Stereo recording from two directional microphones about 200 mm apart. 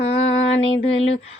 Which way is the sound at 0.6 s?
30° left (ahead or behind).